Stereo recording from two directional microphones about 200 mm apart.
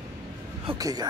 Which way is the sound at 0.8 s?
20° right (ahead or behind).